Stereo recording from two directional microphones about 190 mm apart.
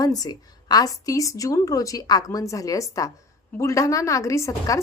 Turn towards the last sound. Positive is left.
turn(degrees=15)  # may be behind; listen again after turning